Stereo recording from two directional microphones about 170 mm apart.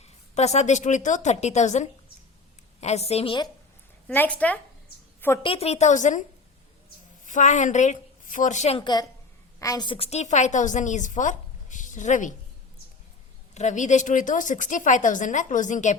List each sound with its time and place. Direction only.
0.0 s a woman's voice: 40° left (ahead or behind)
4.1 s speech: 10° left (ahead or behind)
5.4 s a woman's voice: 35° left (ahead or behind)
7.3 s a woman's voice: 45° left (ahead or behind)
8.8 s a woman's voice: 25° left (ahead or behind); by 12.3 s 45° left (ahead or behind)
13.5 s speech: 45° left (ahead or behind)